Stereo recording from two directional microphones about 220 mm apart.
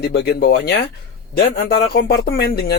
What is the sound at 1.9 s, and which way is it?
Speech, 45° left (ahead or behind).